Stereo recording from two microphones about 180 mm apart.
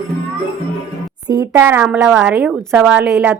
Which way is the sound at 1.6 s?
10° right (ahead or behind).